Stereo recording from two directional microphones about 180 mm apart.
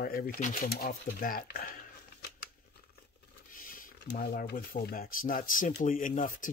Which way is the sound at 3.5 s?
50° left (ahead or behind).